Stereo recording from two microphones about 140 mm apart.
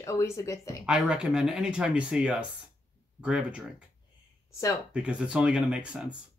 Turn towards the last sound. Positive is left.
turn(degrees=-5)  # may be behind; listen again after turning